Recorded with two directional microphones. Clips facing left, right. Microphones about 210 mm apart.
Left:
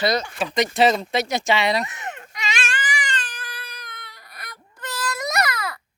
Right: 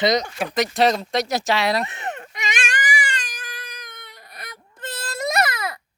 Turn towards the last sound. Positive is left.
turn(degrees=-20)  # may be behind; listen again after turning